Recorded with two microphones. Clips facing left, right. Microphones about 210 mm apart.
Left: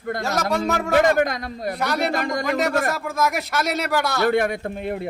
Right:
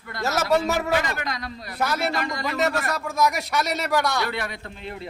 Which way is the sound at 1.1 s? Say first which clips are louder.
Left 10 dB; 50° left (ahead or behind).